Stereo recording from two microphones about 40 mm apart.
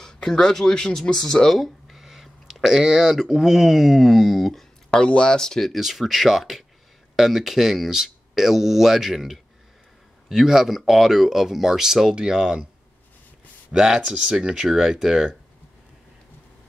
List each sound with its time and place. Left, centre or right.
0.0 s speech: centre
1.6 s a sound: centre
2.0 s speech: centre
4.9 s speech: left
5.7 s speech: centre
13.7 s speech: centre